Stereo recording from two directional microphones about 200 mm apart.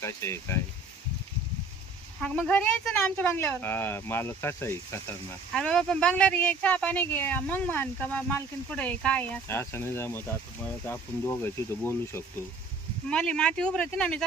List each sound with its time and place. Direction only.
0.0 s speech: 15° left (ahead or behind)
2.2 s speech: 5° left (ahead or behind)